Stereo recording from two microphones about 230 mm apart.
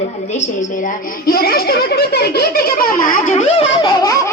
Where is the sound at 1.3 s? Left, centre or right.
Left.